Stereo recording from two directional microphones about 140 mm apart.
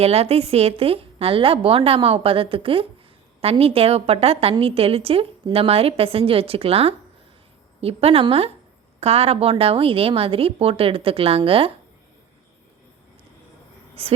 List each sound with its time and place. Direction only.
0.0 s a woman's voice: 45° right (ahead or behind)
14.0 s a woman's voice: 40° right (ahead or behind)